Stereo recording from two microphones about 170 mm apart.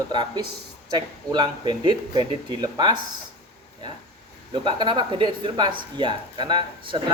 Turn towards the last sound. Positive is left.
turn(degrees=-30)  # may be behind; listen again after turning